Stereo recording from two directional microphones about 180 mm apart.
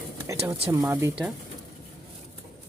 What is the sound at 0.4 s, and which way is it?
Speech, 15° right (ahead or behind).